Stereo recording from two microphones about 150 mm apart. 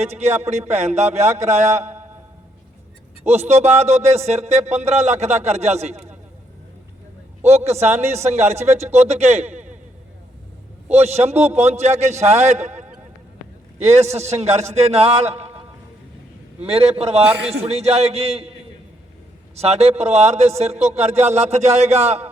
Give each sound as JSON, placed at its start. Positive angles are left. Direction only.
{"t": 0.0, "sound": "speech", "side_deg": -45}
{"t": 3.2, "sound": "speech", "side_deg": -45}
{"t": 7.4, "sound": "speech", "side_deg": -45}
{"t": 10.8, "sound": "speech", "side_deg": -45}
{"t": 16.6, "sound": "speech", "side_deg": -45}
{"t": 19.5, "sound": "speech", "side_deg": -45}